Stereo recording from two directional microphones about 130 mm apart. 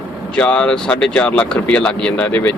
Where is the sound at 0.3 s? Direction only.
5° left (ahead or behind).